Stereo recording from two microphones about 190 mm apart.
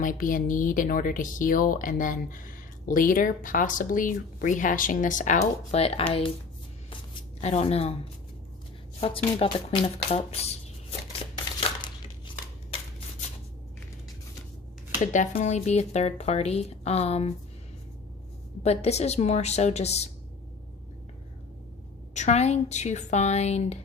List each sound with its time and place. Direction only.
0.0 s speech: 45° left (ahead or behind)
7.1 s speech: 30° left (ahead or behind)
9.0 s speech: 30° left (ahead or behind)
15.0 s speech: 40° left (ahead or behind)
18.6 s speech: 35° left (ahead or behind)
22.1 s speech: 35° left (ahead or behind)